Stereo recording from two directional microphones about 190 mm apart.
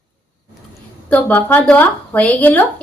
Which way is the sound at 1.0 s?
10° left (ahead or behind).